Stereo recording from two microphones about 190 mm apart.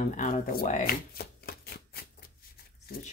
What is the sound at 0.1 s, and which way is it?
Speech, 45° left (ahead or behind).